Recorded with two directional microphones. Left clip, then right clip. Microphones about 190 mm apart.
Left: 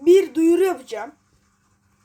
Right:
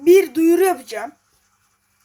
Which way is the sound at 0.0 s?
10° right (ahead or behind).